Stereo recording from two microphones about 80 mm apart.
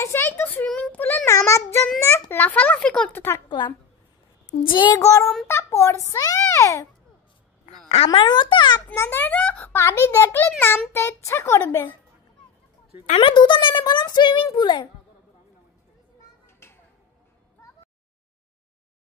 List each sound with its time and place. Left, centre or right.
0.0 s a sound: left
0.7 s child singing: left
1.2 s child singing: left
2.0 s a child's voice: left
2.3 s a child's voice: left
3.2 s a child's voice: left
3.4 s a woman's voice: left
4.9 s a child's voice: left
8.1 s a child's voice: left
8.9 s a child's voice: left
13.2 s a child's voice: left
16.4 s a sound: left